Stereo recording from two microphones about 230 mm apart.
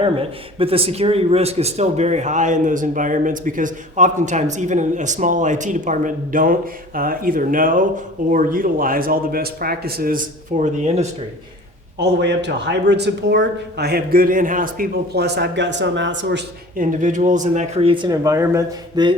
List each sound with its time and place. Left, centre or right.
0.0 s speech: right
10.6 s speech: right
11.9 s speech: right
16.7 s speech: right; by 19.1 s centre